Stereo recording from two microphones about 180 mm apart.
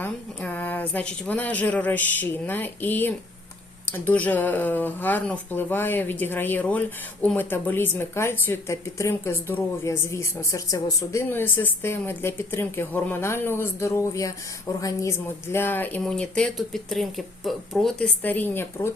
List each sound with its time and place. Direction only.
0.0 s a woman's voice: 10° left (ahead or behind)